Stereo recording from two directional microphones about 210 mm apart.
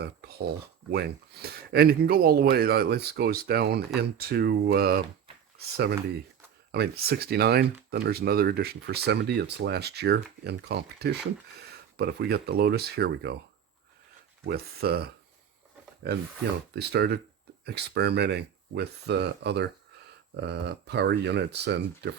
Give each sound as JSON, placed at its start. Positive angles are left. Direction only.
{"t": 0.0, "sound": "a sound", "side_deg": -50}
{"t": 0.9, "sound": "speech", "side_deg": -50}
{"t": 14.4, "sound": "speech", "side_deg": -50}
{"t": 16.7, "sound": "speech", "side_deg": -50}